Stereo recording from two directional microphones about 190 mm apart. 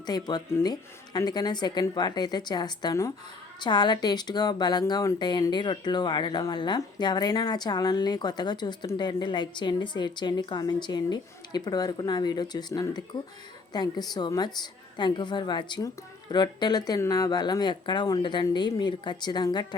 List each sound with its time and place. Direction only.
0.0 s speech: 20° left (ahead or behind)